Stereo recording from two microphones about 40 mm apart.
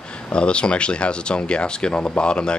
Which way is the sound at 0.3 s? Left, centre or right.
Left.